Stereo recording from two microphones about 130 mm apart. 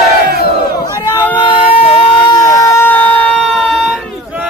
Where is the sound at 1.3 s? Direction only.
40° left (ahead or behind).